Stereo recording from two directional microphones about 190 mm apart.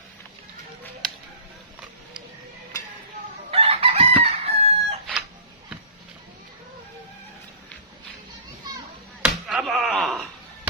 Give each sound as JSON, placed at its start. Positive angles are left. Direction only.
{"t": 3.5, "sound": "chicken", "side_deg": -30}
{"t": 9.2, "sound": "slap", "side_deg": -5}